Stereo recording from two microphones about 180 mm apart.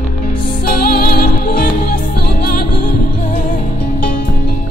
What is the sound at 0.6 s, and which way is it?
Music, 55° left (ahead or behind).